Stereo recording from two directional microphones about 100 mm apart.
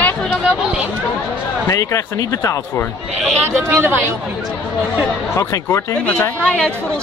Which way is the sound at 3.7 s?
20° right (ahead or behind).